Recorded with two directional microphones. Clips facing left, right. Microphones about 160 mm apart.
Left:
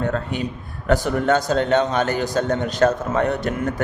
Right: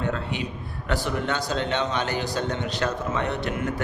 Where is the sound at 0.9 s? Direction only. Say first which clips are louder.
Left 8 dB; 45° left (ahead or behind).